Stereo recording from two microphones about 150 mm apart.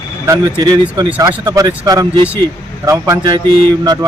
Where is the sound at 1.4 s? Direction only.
25° right (ahead or behind).